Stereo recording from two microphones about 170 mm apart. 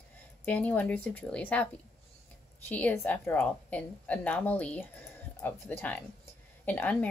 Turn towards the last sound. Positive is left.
turn(degrees=10)  # may be behind; listen again after turning